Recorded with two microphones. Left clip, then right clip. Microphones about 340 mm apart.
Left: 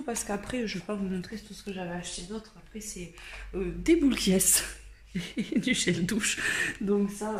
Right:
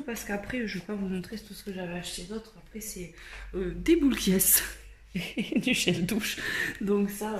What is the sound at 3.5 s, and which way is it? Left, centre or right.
Speech, centre.